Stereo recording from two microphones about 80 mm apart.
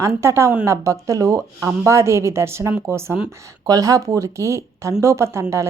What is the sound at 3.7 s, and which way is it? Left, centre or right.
A woman's voice, right.